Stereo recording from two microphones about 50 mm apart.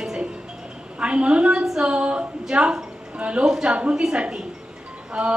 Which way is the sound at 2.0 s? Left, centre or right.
Right.